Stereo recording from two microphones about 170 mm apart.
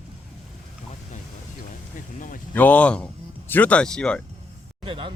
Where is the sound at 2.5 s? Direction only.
10° left (ahead or behind).